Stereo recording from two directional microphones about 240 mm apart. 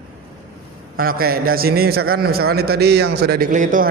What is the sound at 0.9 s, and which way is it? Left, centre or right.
A man's voice, right.